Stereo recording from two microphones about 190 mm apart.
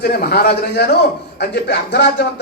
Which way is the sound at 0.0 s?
55° left (ahead or behind).